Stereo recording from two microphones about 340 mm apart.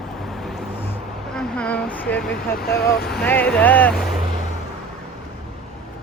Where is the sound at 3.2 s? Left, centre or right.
Centre.